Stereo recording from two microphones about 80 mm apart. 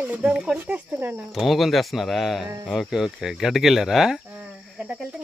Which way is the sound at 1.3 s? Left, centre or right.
Centre.